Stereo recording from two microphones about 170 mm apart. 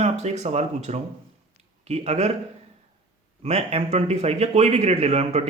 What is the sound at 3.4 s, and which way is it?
Speech, 40° right (ahead or behind).